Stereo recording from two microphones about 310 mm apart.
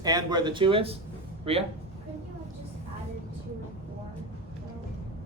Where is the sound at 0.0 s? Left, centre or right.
Centre.